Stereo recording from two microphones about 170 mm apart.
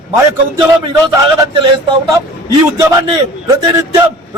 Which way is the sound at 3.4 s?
20° right (ahead or behind).